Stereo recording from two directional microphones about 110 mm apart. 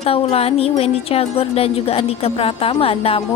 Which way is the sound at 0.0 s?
60° left (ahead or behind).